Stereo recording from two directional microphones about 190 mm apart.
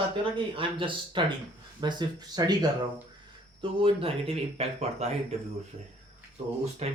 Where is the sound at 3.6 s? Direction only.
25° right (ahead or behind).